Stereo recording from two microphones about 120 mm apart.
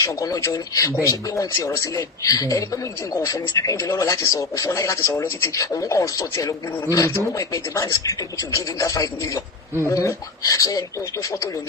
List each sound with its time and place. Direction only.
0.0 s speech: 25° left (ahead or behind)